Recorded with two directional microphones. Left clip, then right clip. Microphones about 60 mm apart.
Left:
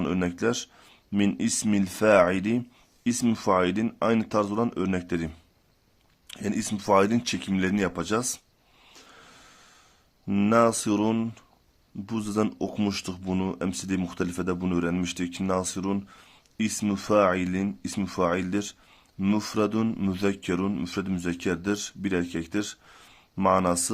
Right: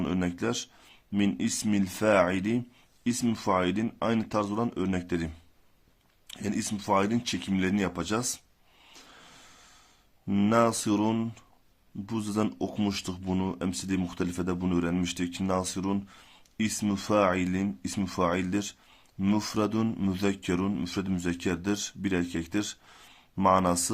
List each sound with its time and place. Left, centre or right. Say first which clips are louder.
0.0 s speech: left 4 dB; left
8.9 s a sound: left 1 dB; left
10.2 s speech: left 3 dB; left